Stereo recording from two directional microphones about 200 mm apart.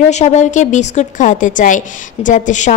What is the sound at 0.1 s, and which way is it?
A woman's voice, 35° left (ahead or behind).